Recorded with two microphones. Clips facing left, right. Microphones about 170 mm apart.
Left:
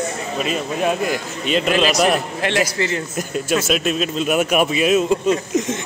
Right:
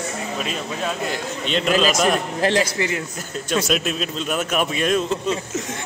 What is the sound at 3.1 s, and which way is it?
Speech, 15° left (ahead or behind).